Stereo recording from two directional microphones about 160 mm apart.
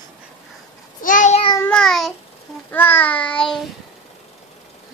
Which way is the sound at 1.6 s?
5° left (ahead or behind).